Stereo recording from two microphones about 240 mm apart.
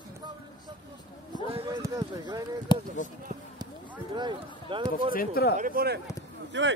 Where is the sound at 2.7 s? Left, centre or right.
Centre.